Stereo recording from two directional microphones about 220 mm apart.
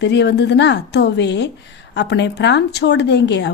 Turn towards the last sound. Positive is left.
turn(degrees=50)  # may be behind; listen again after turning